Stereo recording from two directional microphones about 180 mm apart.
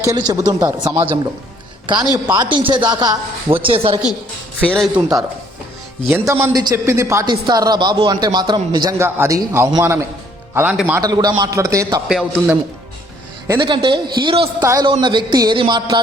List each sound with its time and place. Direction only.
0.0 s speech: 20° right (ahead or behind)
4.6 s a man's voice: 5° left (ahead or behind)
4.9 s speech: 20° right (ahead or behind)
11.0 s speech: 20° right (ahead or behind)
12.0 s a man's voice: centre (ahead or behind)
13.6 s speech: 25° right (ahead or behind)
14.6 s speech: 15° right (ahead or behind)
14.8 s speech: 25° right (ahead or behind)